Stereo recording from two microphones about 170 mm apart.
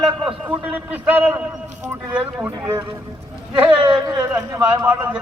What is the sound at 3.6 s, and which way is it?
Speech, 30° right (ahead or behind).